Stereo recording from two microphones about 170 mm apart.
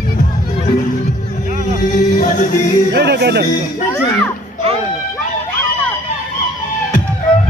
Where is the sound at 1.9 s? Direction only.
45° left (ahead or behind).